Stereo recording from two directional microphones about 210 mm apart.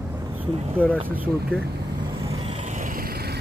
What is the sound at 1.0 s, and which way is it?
Speech, 10° right (ahead or behind).